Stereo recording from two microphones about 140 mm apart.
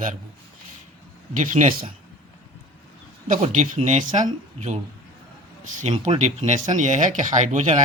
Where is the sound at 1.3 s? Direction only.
65° right (ahead or behind).